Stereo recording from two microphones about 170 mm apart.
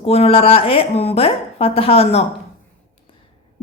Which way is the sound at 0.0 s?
35° left (ahead or behind).